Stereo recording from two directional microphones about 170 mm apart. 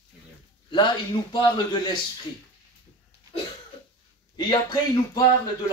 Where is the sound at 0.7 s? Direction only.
25° left (ahead or behind).